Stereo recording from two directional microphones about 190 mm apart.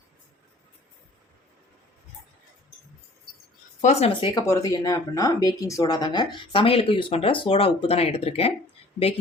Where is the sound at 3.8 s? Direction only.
35° left (ahead or behind).